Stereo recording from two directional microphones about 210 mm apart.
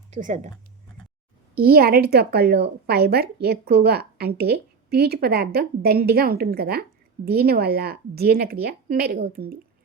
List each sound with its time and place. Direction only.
0.1 s speech: 35° right (ahead or behind)
1.5 s a woman's voice: 45° right (ahead or behind)